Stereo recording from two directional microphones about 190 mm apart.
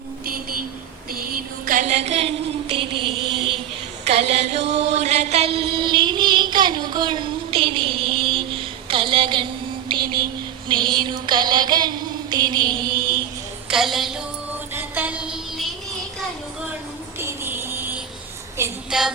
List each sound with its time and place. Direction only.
1.1 s music: 50° right (ahead or behind); by 3.1 s 25° right (ahead or behind)
4.0 s chant: 35° right (ahead or behind)
9.9 s a sound: 25° right (ahead or behind)
10.7 s music: 25° right (ahead or behind)
12.3 s mantra: 25° right (ahead or behind)
13.7 s a woman's voice: centre (ahead or behind)
14.7 s music: 10° right (ahead or behind)
17.2 s a sound: 10° right (ahead or behind)
18.9 s a woman's voice: 5° right (ahead or behind)